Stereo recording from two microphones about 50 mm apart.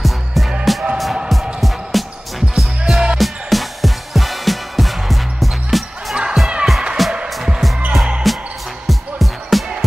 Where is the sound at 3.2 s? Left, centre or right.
Centre.